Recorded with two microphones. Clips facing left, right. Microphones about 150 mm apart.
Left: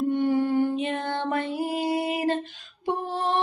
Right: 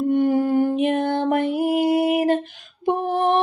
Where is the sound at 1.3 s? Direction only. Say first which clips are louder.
Right 6 dB; 60° right (ahead or behind).